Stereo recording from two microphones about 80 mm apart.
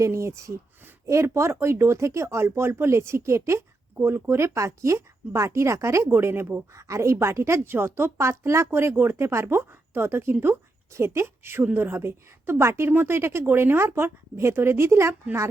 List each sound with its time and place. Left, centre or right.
0.0 s speech: right